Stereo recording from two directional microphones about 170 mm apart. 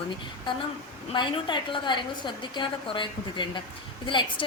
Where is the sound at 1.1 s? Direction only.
30° left (ahead or behind).